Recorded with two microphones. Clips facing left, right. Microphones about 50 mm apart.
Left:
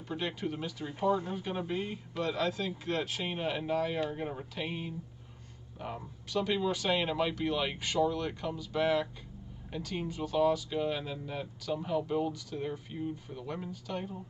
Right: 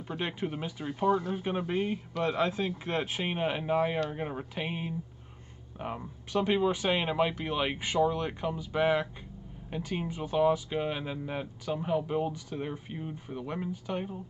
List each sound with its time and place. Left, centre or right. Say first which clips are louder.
0.1 s speech: right 1 dB; right